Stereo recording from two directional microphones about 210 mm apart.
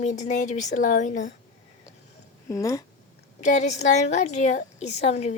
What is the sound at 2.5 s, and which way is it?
Speech, 15° left (ahead or behind).